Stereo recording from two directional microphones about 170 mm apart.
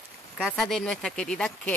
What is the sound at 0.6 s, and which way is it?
Speech, 5° left (ahead or behind).